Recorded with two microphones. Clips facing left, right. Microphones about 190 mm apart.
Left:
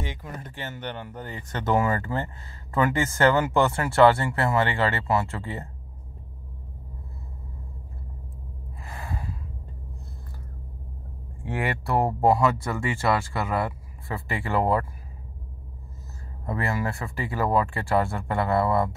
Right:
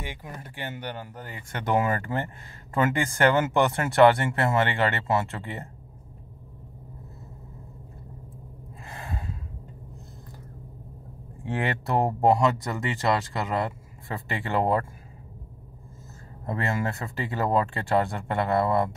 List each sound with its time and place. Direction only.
0.0 s speech: 15° right (ahead or behind)
8.8 s gasp: 25° right (ahead or behind)
11.5 s speech: 20° right (ahead or behind)
16.4 s speech: 25° right (ahead or behind)